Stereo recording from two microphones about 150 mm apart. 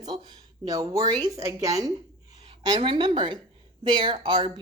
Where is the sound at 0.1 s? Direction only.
35° right (ahead or behind).